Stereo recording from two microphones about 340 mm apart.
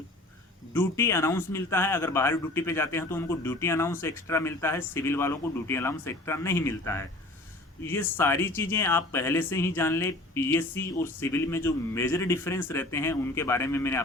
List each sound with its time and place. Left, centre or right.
0.7 s speech: centre